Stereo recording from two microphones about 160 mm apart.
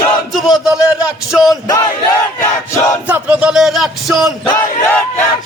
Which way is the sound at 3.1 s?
10° right (ahead or behind).